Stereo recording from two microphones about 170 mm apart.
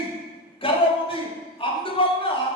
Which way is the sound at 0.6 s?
30° left (ahead or behind).